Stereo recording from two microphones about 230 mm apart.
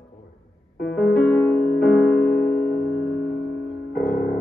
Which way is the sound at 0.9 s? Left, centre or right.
Centre.